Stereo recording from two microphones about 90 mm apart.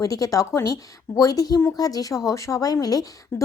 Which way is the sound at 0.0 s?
40° left (ahead or behind).